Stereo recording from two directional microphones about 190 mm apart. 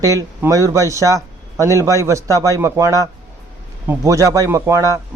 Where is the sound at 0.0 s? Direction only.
15° right (ahead or behind).